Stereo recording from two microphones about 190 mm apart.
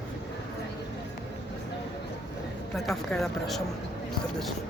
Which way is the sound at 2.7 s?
Centre (ahead or behind).